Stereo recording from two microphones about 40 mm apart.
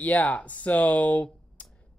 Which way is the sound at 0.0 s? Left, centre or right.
Left.